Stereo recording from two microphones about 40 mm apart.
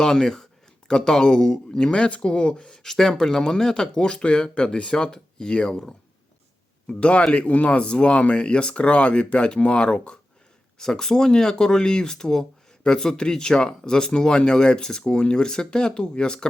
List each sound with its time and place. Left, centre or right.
0.0 s speech: centre
2.8 s speech: centre
6.8 s speech: left
10.8 s speech: centre